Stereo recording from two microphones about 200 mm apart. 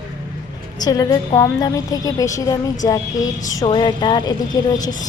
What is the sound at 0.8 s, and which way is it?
A woman's voice, 20° left (ahead or behind).